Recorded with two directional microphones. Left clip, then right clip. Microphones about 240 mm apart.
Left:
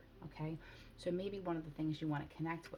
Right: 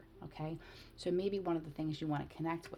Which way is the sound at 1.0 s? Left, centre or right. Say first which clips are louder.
Right 5 dB; right.